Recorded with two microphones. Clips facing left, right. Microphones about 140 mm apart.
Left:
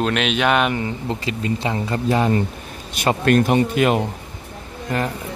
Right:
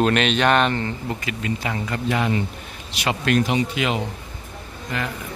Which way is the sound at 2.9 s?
45° left (ahead or behind).